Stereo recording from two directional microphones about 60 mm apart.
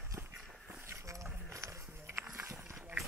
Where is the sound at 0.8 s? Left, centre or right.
Right.